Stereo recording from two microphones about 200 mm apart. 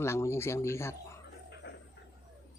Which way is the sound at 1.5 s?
60° left (ahead or behind).